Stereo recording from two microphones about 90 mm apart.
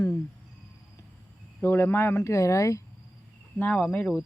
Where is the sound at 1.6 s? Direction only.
25° left (ahead or behind).